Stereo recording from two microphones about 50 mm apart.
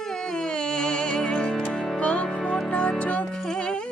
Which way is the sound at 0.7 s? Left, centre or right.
Centre.